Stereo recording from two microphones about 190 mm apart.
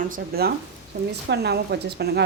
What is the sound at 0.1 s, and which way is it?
A woman's voice, 55° right (ahead or behind).